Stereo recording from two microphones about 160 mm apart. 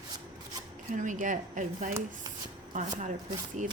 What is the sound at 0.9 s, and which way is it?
Speech, 55° right (ahead or behind).